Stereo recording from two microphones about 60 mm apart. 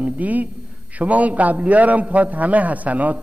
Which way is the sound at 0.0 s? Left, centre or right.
Right.